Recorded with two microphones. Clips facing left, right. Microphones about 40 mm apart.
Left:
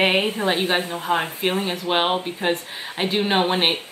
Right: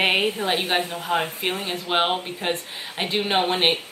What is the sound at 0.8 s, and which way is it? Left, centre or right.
Speech, left.